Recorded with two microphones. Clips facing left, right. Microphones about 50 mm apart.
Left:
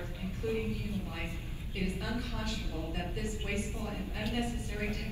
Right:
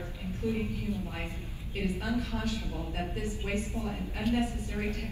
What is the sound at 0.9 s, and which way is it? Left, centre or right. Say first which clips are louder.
Speech: right 4 dB; left.